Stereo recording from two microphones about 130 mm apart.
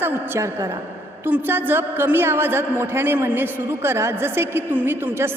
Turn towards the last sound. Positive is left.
turn(degrees=-15)  # may be behind; listen again after turning